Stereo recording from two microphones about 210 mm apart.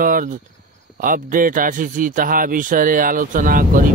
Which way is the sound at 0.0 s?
40° right (ahead or behind).